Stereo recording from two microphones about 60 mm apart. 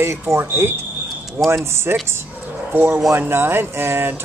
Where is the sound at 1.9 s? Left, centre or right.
Right.